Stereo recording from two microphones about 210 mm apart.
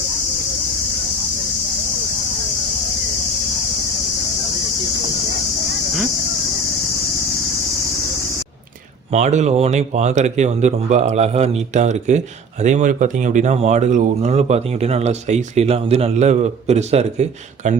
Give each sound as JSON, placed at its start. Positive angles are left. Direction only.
{"t": 9.1, "sound": "speech", "side_deg": -35}